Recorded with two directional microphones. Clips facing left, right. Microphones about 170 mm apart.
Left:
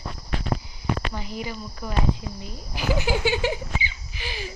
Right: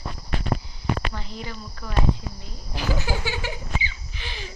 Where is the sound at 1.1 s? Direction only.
10° left (ahead or behind).